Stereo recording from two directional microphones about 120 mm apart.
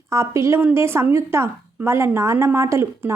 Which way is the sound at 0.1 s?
25° right (ahead or behind).